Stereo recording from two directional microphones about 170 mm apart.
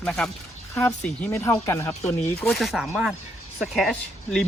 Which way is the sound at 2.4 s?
Centre (ahead or behind).